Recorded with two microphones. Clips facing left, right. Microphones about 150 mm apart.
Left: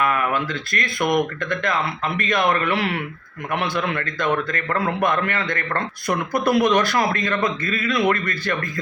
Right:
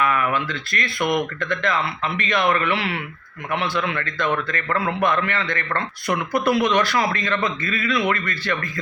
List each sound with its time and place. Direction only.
0.0 s speech: 45° left (ahead or behind)